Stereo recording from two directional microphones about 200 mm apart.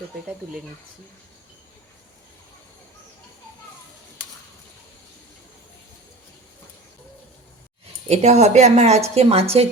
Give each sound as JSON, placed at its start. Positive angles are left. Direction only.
{"t": 8.0, "sound": "a woman's voice", "side_deg": -35}